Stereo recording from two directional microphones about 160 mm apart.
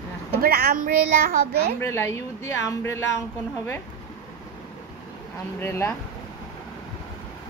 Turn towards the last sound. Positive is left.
turn(degrees=15)  # may be behind; listen again after turning